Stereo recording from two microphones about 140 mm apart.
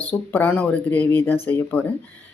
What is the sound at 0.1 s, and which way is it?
Speech, 10° left (ahead or behind).